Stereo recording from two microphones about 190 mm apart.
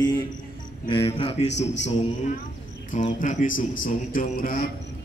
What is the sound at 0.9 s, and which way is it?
Speech, 30° left (ahead or behind).